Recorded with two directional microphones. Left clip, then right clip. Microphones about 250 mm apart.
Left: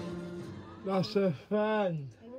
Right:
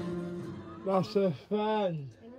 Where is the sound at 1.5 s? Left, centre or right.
Centre.